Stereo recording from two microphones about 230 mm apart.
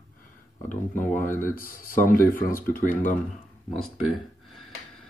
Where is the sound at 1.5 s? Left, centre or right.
Left.